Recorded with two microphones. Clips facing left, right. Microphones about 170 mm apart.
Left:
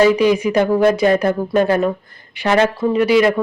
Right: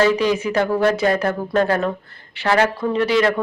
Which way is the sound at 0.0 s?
15° left (ahead or behind).